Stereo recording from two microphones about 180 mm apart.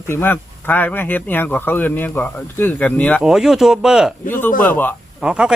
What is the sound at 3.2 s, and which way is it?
Speech, centre (ahead or behind).